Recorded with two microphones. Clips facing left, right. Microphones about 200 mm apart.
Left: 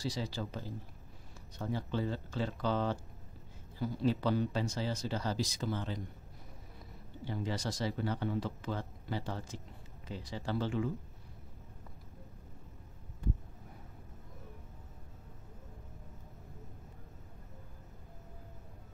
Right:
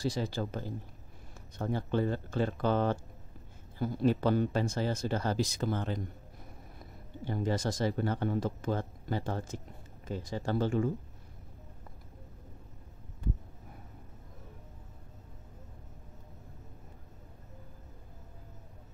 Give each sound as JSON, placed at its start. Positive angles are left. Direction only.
{"t": 0.0, "sound": "speech", "side_deg": -50}
{"t": 7.2, "sound": "speech", "side_deg": -50}